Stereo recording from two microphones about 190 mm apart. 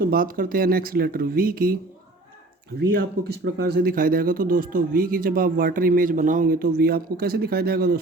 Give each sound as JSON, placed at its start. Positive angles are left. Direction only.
{"t": 0.1, "sound": "speech", "side_deg": -50}
{"t": 2.7, "sound": "speech", "side_deg": -60}